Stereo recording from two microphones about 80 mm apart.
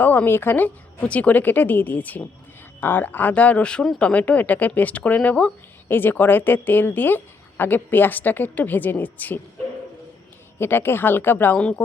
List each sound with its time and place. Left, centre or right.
0.0 s speech: left
10.6 s speech: left
11.5 s speech: centre